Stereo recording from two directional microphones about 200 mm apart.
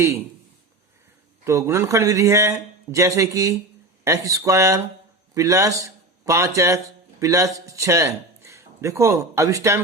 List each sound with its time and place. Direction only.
1.5 s a man's voice: 15° right (ahead or behind)